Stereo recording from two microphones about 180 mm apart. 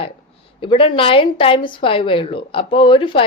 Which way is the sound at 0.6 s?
30° left (ahead or behind).